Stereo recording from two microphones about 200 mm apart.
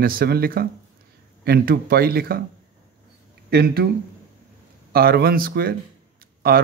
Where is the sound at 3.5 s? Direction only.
50° right (ahead or behind).